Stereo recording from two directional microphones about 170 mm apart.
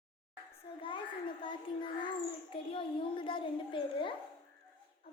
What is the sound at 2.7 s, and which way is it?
A child's voice, 30° left (ahead or behind).